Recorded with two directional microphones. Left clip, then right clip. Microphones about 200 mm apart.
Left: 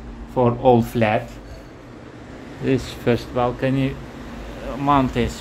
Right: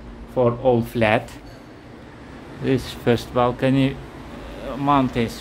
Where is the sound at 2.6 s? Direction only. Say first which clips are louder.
Even; centre (ahead or behind); by 3.9 s 20° right (ahead or behind).